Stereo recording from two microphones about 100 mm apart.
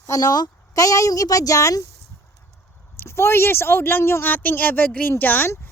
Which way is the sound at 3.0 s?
25° left (ahead or behind).